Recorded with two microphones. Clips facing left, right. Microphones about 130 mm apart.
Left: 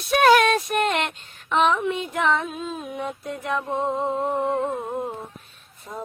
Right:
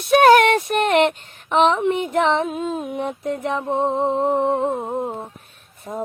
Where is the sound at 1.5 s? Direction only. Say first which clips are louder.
Right 4 dB; 20° right (ahead or behind).